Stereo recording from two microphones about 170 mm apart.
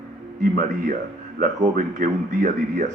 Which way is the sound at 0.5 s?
50° right (ahead or behind).